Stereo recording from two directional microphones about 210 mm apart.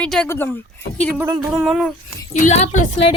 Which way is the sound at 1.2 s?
15° right (ahead or behind).